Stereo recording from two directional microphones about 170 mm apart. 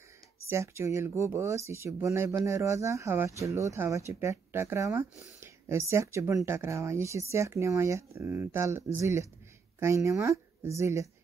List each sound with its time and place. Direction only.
0.5 s speech: 15° right (ahead or behind)